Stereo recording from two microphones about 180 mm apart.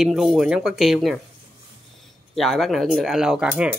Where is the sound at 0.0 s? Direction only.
Centre (ahead or behind).